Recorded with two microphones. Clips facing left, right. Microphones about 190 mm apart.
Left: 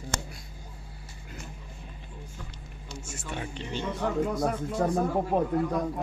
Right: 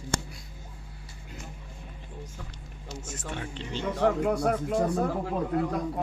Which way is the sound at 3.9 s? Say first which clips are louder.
Right 4 dB; 70° right (ahead or behind).